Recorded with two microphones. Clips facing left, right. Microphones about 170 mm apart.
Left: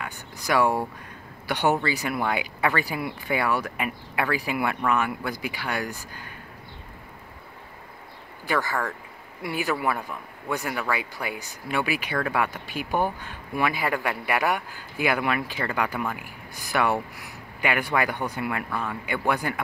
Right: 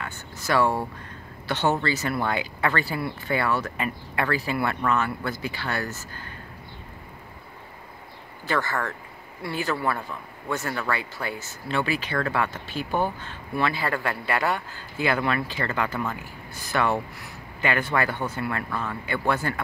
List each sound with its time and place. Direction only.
0.0 s a sound: 15° left (ahead or behind)
1.5 s speech: 15° left (ahead or behind)
8.5 s speech: 15° left (ahead or behind)